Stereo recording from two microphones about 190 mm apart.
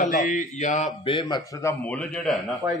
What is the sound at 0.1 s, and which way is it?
Speech, 40° left (ahead or behind).